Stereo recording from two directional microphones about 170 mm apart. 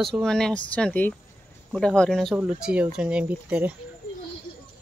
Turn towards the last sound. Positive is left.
turn(degrees=-10)  # may be behind; listen again after turning